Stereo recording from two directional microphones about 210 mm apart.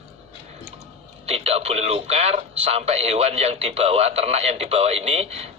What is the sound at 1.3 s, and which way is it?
Speech, 30° right (ahead or behind).